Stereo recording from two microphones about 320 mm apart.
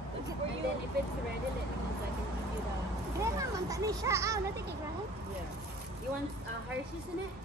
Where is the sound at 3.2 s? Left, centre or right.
Centre.